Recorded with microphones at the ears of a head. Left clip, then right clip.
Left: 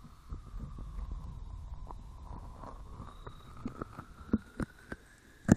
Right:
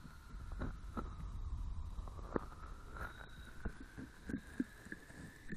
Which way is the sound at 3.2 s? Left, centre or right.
Left.